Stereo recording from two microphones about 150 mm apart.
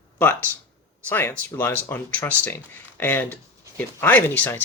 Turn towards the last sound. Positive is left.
turn(degrees=10)  # may be behind; listen again after turning